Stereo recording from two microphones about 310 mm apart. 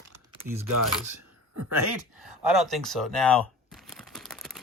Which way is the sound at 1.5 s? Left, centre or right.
Right.